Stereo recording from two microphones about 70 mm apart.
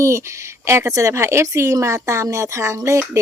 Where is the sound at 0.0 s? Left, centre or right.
Right.